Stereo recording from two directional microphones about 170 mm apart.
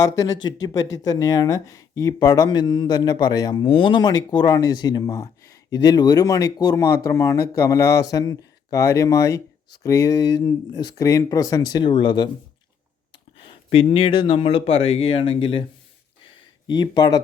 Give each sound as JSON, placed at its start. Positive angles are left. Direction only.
{"t": 0.0, "sound": "speech", "side_deg": 20}
{"t": 13.5, "sound": "speech", "side_deg": 35}
{"t": 16.6, "sound": "speech", "side_deg": 25}